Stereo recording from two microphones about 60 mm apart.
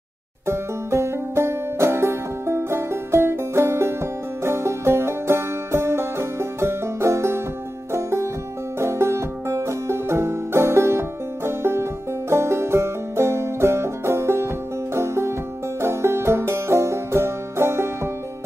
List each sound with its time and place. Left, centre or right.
0.5 s banjo: right
7.9 s music: right
15.8 s banjo: right